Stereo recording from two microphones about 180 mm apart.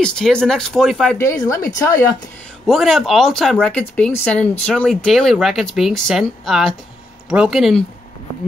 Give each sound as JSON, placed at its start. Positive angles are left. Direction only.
{"t": 0.0, "sound": "speech", "side_deg": 5}
{"t": 1.1, "sound": "speech", "side_deg": 15}
{"t": 2.6, "sound": "speech", "side_deg": 0}